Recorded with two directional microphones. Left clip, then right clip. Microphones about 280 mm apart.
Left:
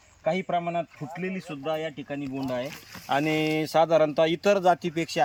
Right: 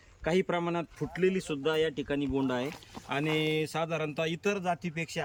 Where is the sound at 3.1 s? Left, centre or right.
Centre.